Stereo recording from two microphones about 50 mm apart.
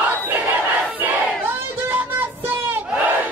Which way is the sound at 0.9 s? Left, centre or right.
Right.